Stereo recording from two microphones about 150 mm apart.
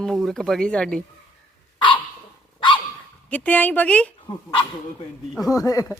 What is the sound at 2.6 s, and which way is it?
Dog, 30° left (ahead or behind).